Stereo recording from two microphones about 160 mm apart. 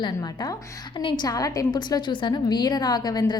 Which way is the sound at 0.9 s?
30° left (ahead or behind).